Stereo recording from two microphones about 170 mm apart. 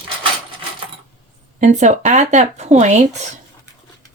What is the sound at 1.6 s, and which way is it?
Speech, 45° right (ahead or behind).